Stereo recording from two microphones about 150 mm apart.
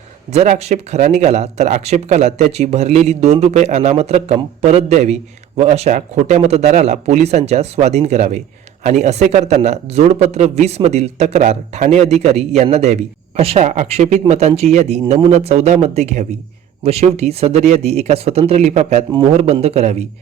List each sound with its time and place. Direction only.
0.3 s a man's voice: 45° right (ahead or behind)